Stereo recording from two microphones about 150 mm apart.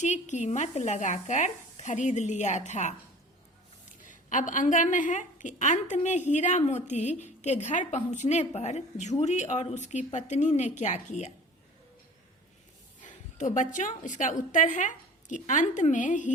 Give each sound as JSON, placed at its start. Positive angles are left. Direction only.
{"t": 0.0, "sound": "a woman's voice", "side_deg": 50}
{"t": 4.0, "sound": "a woman's voice", "side_deg": 60}
{"t": 13.0, "sound": "a woman's voice", "side_deg": 60}